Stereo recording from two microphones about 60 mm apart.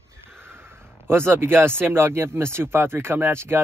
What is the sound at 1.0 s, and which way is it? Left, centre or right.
Speech, right.